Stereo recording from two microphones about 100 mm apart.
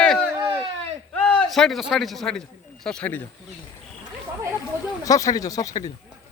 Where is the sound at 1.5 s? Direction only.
Centre (ahead or behind).